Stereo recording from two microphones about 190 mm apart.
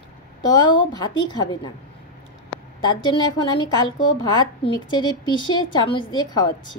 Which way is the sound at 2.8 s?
25° left (ahead or behind).